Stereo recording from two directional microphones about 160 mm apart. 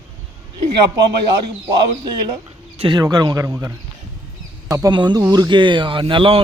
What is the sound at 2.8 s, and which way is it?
A man's voice, 30° right (ahead or behind).